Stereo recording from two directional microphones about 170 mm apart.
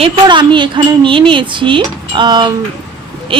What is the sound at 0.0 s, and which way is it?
Speech, 30° right (ahead or behind).